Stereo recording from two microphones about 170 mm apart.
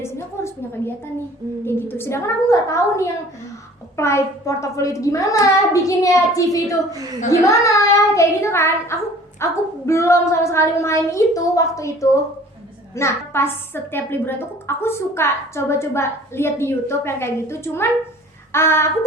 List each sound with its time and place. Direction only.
0.0 s a woman's voice: 15° left (ahead or behind)